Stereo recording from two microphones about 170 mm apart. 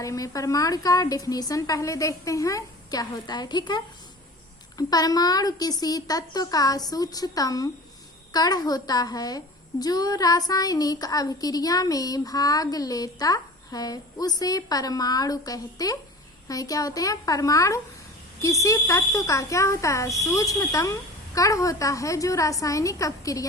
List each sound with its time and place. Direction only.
0.0 s a child's voice: 20° left (ahead or behind)